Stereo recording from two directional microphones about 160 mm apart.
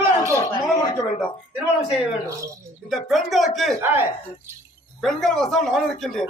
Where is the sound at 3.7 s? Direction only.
15° right (ahead or behind).